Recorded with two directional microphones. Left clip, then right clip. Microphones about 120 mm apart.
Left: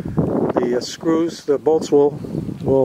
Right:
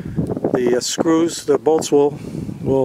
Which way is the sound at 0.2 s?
40° left (ahead or behind).